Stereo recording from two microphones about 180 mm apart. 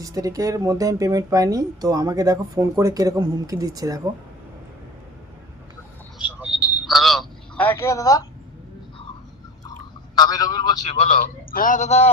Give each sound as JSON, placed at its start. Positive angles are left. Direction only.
{"t": 0.0, "sound": "speech", "side_deg": -20}
{"t": 6.1, "sound": "telephone", "side_deg": -5}
{"t": 10.2, "sound": "a man's voice", "side_deg": 20}
{"t": 11.0, "sound": "a man's voice", "side_deg": 45}